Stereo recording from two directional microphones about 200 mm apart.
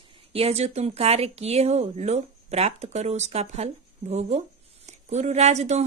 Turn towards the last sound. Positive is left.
turn(degrees=-35)  # may be behind; listen again after turning